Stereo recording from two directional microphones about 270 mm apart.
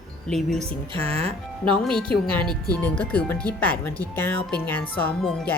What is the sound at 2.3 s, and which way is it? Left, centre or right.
Speech, centre.